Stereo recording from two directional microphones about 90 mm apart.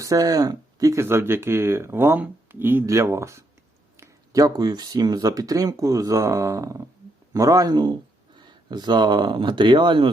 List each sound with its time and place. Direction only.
0.0 s speech: 40° right (ahead or behind)
1.0 s speech: 25° right (ahead or behind); by 10.1 s 60° right (ahead or behind)